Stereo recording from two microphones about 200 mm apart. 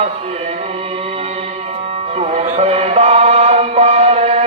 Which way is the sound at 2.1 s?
30° right (ahead or behind).